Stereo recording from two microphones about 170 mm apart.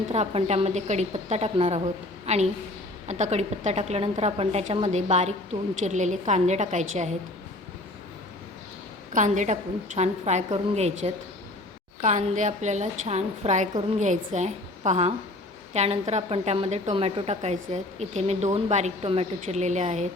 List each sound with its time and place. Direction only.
0.1 s a woman's voice: 40° right (ahead or behind)
9.1 s a woman's voice: 45° right (ahead or behind)